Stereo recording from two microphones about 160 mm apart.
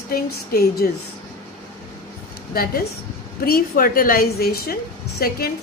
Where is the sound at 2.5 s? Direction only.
70° left (ahead or behind).